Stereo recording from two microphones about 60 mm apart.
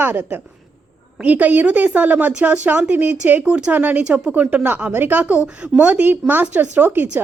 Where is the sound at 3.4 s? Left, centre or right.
Centre.